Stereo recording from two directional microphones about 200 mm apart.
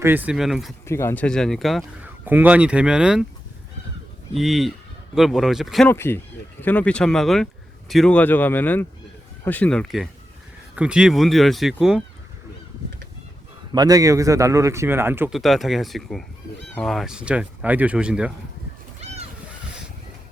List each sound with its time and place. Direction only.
0.0 s speech: 10° right (ahead or behind)
0.9 s speech: 15° left (ahead or behind); by 3.2 s 5° right (ahead or behind)
4.4 s speech: centre (ahead or behind)
5.9 s speech: 10° left (ahead or behind)
13.7 s a man's voice: 20° right (ahead or behind)
15.4 s speech: centre (ahead or behind)
18.9 s splash: 35° right (ahead or behind)